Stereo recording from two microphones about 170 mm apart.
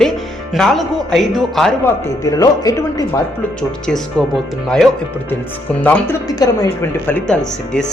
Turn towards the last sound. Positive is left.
turn(degrees=5)  # may be behind; listen again after turning